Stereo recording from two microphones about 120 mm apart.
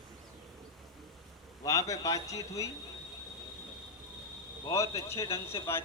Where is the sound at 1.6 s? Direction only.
30° left (ahead or behind).